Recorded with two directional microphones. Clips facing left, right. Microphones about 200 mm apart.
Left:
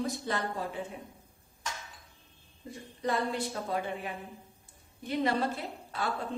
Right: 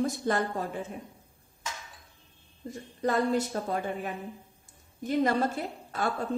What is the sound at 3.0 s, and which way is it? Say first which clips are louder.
A woman's voice: right 5 dB; 45° right (ahead or behind).